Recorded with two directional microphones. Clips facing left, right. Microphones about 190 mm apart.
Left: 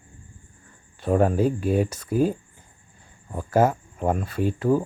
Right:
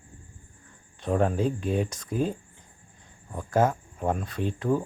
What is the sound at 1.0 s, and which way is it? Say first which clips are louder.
Speech: left 4 dB; 5° left (ahead or behind).